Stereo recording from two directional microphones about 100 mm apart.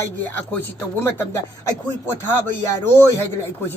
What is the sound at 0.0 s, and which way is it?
A woman's voice, 20° left (ahead or behind).